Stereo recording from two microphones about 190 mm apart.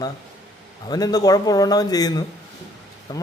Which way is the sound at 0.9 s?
20° left (ahead or behind).